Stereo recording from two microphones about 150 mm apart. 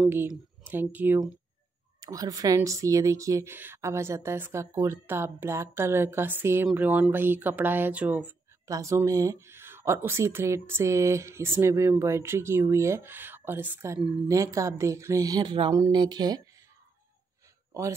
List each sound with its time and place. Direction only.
0.3 s speech: 10° right (ahead or behind)
2.0 s speech: 25° right (ahead or behind)
8.6 s speech: 20° right (ahead or behind)